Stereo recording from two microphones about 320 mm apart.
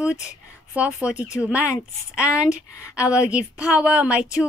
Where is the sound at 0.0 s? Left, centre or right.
Centre.